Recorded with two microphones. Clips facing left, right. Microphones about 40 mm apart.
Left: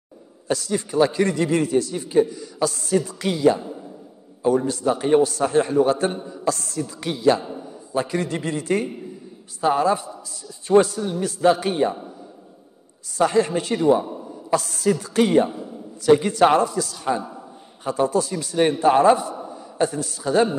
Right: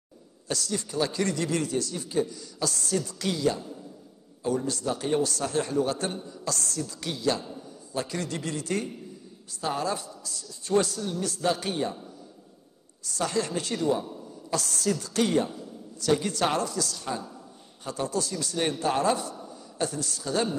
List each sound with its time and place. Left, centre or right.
0.5 s a man's voice: centre
13.1 s a man's voice: centre